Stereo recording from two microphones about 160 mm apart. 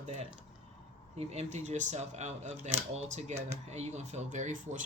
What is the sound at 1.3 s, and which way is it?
Speech, 45° right (ahead or behind).